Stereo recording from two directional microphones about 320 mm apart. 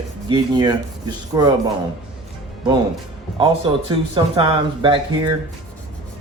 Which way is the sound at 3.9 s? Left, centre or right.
Centre.